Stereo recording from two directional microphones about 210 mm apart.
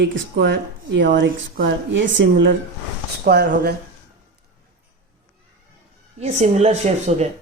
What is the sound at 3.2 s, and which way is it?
Speech, 45° right (ahead or behind).